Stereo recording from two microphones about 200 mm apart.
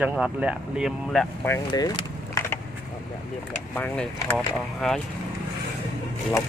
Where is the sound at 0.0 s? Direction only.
5° right (ahead or behind).